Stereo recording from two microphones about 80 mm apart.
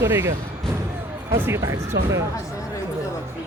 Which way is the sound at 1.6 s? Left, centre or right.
Right.